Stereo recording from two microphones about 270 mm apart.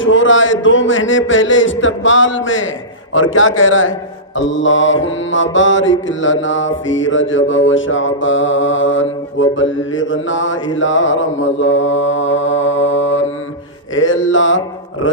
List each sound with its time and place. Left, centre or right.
0.0 s mantra: left